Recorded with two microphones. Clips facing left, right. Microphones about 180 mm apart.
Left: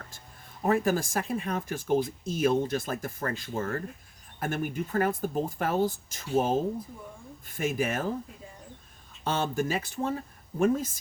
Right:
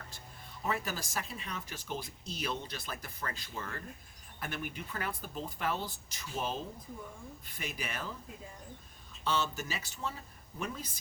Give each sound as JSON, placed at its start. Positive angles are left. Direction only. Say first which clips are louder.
{"t": 0.6, "sound": "speech", "louder": "left 11 dB", "side_deg": 50}
{"t": 9.2, "sound": "speech", "louder": "left 6 dB", "side_deg": 50}